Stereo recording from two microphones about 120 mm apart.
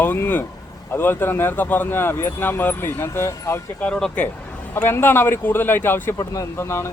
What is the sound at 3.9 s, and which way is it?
Speech, 5° left (ahead or behind).